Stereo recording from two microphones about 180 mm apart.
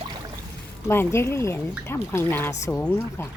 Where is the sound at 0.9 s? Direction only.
15° left (ahead or behind).